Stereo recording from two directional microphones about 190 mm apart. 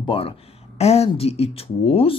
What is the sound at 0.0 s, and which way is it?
Speech, 30° left (ahead or behind).